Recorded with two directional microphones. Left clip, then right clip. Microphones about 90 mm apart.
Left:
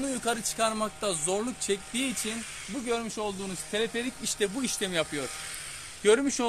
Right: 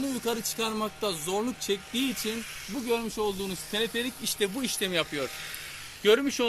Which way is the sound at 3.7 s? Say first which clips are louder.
Even; 40° left (ahead or behind).